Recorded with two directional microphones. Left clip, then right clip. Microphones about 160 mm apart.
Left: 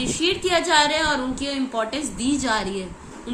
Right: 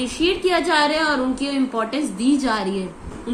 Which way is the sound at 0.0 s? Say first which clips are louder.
Right 2 dB; 15° left (ahead or behind).